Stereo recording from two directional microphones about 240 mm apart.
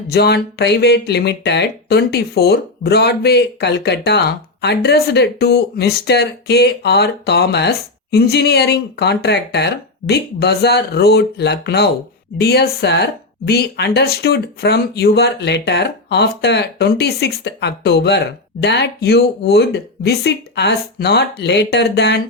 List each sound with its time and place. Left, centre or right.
0.1 s speech: left